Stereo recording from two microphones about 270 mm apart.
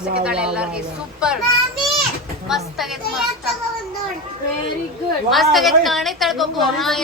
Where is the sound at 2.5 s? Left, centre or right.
Centre.